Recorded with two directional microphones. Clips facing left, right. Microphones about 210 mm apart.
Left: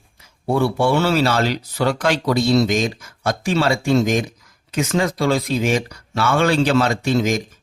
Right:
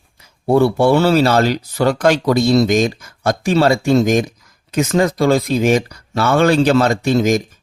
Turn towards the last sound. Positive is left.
turn(degrees=-45)  # may be behind; listen again after turning